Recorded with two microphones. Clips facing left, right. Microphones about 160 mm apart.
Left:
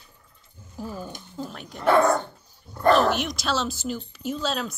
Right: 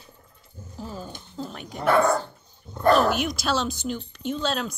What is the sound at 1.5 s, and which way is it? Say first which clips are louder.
Speech: left 1 dB; 5° right (ahead or behind).